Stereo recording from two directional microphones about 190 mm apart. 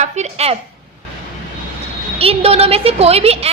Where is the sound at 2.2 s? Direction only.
30° right (ahead or behind).